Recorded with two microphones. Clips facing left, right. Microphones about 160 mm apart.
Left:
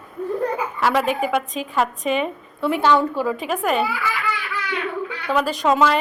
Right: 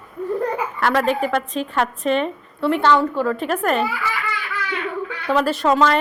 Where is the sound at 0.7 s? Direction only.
5° left (ahead or behind).